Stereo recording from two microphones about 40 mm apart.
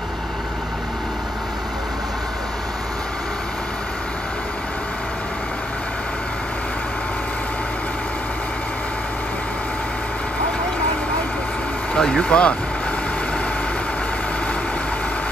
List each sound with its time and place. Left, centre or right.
12.0 s speech: centre